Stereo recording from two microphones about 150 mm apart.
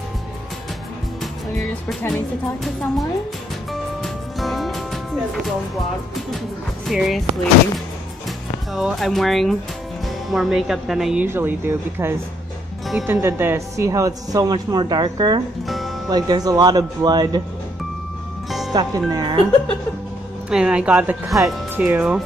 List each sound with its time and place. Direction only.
1.2 s music: centre (ahead or behind)
2.6 s speech: centre (ahead or behind)
3.7 s music: centre (ahead or behind)
6.9 s speech: centre (ahead or behind)
8.7 s speech: centre (ahead or behind)
11.2 s speech: 15° right (ahead or behind); by 15.4 s 30° right (ahead or behind)
15.6 s music: centre (ahead or behind)
16.1 s speech: 25° right (ahead or behind)
18.7 s speech: 25° right (ahead or behind)
20.4 s speech: 5° right (ahead or behind)